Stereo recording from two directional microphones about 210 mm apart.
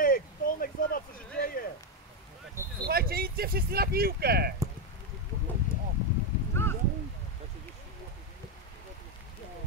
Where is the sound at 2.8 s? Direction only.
45° right (ahead or behind).